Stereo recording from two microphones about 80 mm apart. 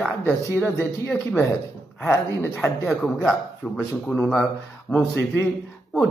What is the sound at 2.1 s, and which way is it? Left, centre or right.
Speech, left.